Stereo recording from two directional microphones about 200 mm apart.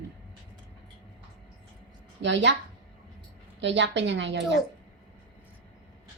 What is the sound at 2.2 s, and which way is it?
Speech, 60° right (ahead or behind).